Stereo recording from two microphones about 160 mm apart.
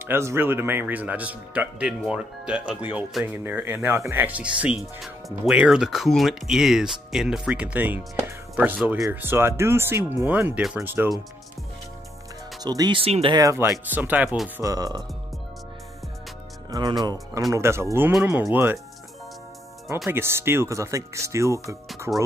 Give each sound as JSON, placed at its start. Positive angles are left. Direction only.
{"t": 0.0, "sound": "speech", "side_deg": -15}
{"t": 12.6, "sound": "speech", "side_deg": -25}
{"t": 13.4, "sound": "speech", "side_deg": -20}
{"t": 14.6, "sound": "speech", "side_deg": -20}
{"t": 17.0, "sound": "speech", "side_deg": -25}
{"t": 20.1, "sound": "speech", "side_deg": -15}